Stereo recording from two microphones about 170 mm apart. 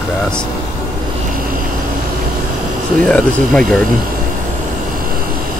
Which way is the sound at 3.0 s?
5° left (ahead or behind).